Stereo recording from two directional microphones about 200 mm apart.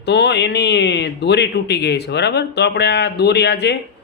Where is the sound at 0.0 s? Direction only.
60° left (ahead or behind).